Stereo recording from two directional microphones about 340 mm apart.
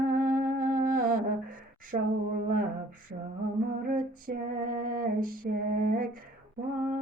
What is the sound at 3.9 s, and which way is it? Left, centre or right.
Female singing, right.